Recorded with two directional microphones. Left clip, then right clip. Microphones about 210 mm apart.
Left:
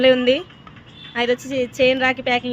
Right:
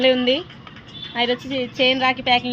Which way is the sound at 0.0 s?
45° left (ahead or behind).